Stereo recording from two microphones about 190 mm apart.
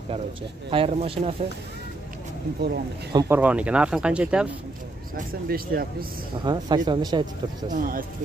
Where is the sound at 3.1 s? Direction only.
20° right (ahead or behind).